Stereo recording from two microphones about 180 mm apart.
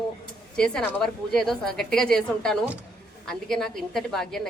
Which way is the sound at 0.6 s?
5° left (ahead or behind).